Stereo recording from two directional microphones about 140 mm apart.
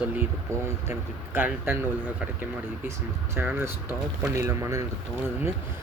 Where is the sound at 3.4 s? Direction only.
15° right (ahead or behind).